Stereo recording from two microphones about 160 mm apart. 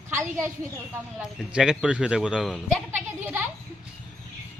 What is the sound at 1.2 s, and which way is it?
A woman's voice, 5° right (ahead or behind).